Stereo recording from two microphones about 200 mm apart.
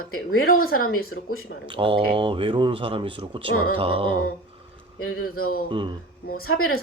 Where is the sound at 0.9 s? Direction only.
90° left.